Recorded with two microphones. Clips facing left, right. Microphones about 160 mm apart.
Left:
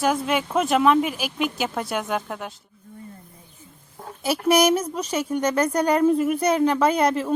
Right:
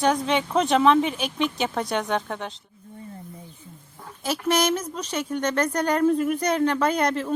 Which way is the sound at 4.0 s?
40° left (ahead or behind).